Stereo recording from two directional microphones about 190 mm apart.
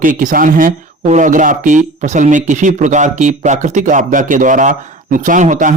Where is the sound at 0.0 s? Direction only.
45° right (ahead or behind).